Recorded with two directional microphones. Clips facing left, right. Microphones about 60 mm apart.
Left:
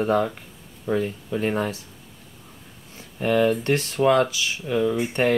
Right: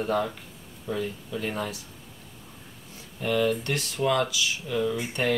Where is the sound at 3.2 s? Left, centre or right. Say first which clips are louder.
Left 5 dB; left.